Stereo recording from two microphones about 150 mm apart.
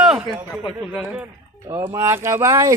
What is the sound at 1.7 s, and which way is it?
Speech, 20° right (ahead or behind).